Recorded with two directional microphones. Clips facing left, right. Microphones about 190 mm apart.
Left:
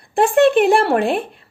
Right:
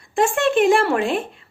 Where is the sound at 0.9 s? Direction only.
60° left (ahead or behind).